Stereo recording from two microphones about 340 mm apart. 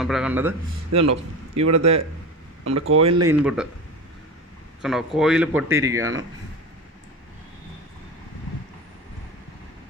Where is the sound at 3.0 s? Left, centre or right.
Centre.